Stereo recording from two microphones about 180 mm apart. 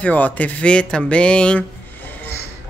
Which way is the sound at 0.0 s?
10° left (ahead or behind).